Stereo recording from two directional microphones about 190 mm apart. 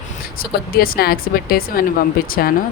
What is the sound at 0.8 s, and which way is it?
Speech, 50° left (ahead or behind).